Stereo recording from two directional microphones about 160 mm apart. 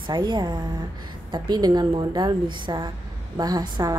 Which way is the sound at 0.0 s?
30° right (ahead or behind).